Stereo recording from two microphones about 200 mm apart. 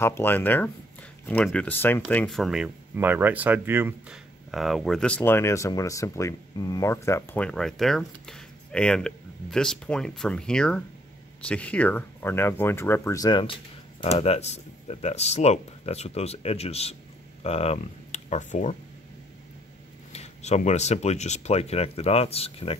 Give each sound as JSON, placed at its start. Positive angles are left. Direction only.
{"t": 0.0, "sound": "speech", "side_deg": 10}
{"t": 4.5, "sound": "speech", "side_deg": 0}
{"t": 20.1, "sound": "speech", "side_deg": 35}